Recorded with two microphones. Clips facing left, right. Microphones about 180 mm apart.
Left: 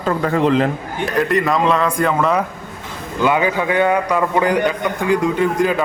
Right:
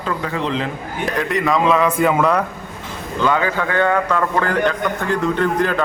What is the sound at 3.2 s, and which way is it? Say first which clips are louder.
A man's voice: left 2 dB; 15° left (ahead or behind).